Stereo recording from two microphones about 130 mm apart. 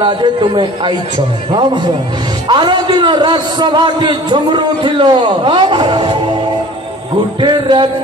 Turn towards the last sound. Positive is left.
turn(degrees=-35)  # may be behind; listen again after turning